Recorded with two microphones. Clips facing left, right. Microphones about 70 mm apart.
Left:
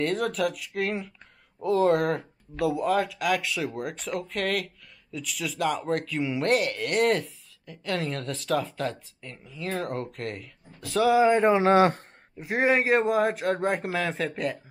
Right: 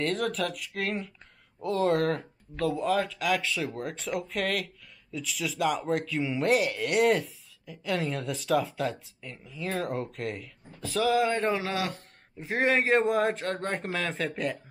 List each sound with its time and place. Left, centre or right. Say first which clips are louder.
0.0 s speech: left 3 dB; centre
11.1 s speech: left 6 dB; centre
11.6 s speech: left 12 dB; left
12.4 s speech: left 2 dB; centre